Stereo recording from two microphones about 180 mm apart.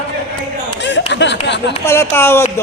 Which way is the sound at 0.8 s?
80° left.